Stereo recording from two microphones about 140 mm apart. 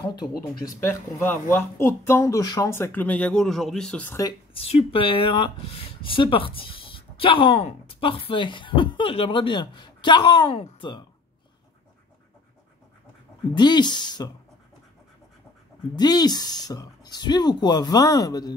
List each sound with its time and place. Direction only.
0.0 s speech: 30° left (ahead or behind)
0.7 s speech: 15° left (ahead or behind)
4.1 s speech: 25° left (ahead or behind)
4.6 s speech: 45° left (ahead or behind)
13.6 s speech: 30° left (ahead or behind)
16.0 s speech: 30° left (ahead or behind)